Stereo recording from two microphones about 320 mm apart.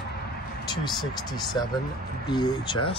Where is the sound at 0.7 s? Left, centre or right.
Centre.